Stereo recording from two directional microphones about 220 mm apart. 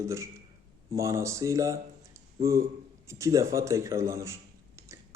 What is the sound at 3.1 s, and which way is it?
A man's voice, 15° right (ahead or behind).